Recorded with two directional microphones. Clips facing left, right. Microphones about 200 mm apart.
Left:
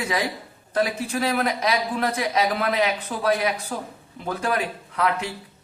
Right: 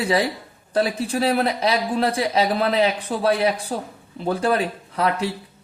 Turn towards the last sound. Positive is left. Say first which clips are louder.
# right 2 dB
turn(degrees=-35)  # may be behind; listen again after turning